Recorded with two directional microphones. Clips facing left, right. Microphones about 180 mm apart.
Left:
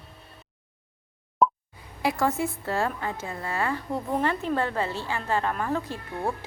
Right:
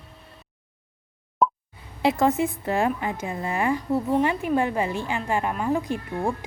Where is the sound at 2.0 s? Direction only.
20° right (ahead or behind).